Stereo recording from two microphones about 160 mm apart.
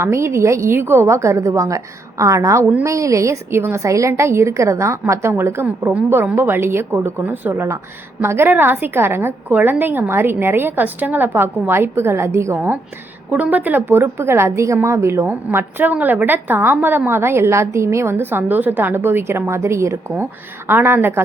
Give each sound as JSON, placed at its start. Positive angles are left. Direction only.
{"t": 0.0, "sound": "a woman's voice", "side_deg": -15}